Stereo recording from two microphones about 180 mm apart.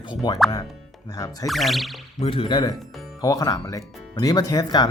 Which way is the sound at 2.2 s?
30° left (ahead or behind).